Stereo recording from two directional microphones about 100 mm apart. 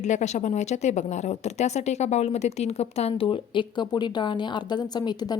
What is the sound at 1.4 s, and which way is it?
A woman's voice, 90° left.